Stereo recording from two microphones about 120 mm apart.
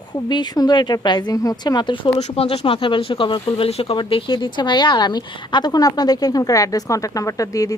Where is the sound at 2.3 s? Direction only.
60° left (ahead or behind).